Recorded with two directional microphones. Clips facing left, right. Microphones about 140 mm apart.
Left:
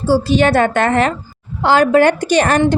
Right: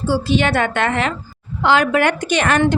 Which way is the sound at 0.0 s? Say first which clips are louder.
Left 4 dB; 40° left (ahead or behind).